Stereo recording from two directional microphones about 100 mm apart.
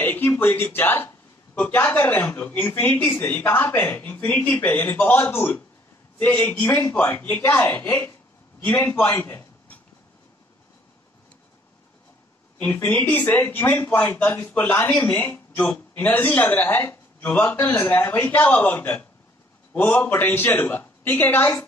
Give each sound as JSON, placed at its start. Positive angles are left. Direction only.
{"t": 0.0, "sound": "a man's voice", "side_deg": 20}
{"t": 9.2, "sound": "a sound", "side_deg": 20}
{"t": 12.5, "sound": "a man's voice", "side_deg": 20}